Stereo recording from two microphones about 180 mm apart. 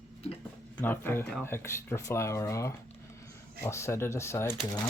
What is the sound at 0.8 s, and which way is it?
Speech, 10° left (ahead or behind).